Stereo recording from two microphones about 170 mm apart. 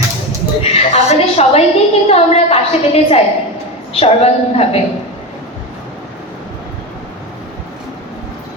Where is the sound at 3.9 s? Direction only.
35° left (ahead or behind).